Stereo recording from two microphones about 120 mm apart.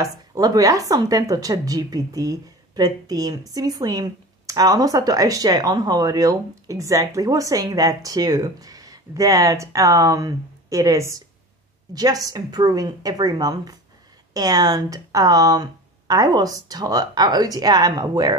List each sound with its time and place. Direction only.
0.0 s a woman's voice: 30° right (ahead or behind)